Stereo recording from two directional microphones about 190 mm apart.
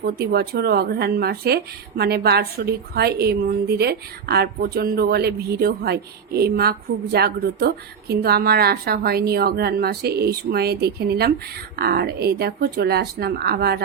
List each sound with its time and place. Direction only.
0.0 s speech: 55° right (ahead or behind)